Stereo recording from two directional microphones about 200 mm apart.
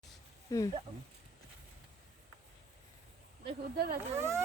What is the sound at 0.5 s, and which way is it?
Speech, 15° left (ahead or behind).